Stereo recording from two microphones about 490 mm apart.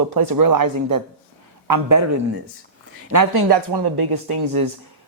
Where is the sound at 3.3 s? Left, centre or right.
Right.